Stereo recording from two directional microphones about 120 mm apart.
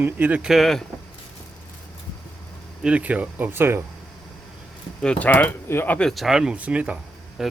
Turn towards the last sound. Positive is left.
turn(degrees=-10)  # may be behind; listen again after turning